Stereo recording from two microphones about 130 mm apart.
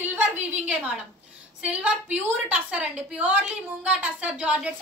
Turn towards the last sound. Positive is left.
turn(degrees=-10)  # may be behind; listen again after turning